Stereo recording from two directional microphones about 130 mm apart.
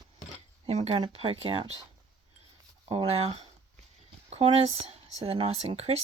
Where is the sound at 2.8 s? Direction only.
50° right (ahead or behind).